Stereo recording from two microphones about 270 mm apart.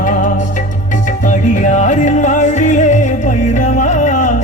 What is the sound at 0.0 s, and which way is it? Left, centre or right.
Music, left.